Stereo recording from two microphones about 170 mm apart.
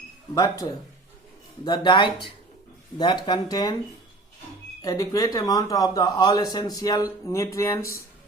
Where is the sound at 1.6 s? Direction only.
25° left (ahead or behind).